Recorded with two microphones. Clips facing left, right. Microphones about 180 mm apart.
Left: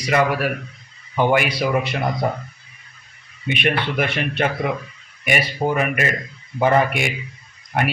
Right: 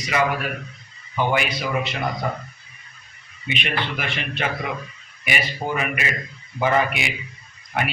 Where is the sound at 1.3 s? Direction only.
60° left (ahead or behind).